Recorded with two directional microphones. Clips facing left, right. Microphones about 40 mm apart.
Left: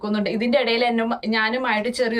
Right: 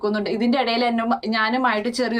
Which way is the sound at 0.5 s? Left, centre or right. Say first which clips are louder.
Left 1 dB; centre.